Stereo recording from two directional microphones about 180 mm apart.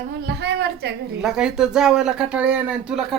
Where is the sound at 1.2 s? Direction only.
5° right (ahead or behind).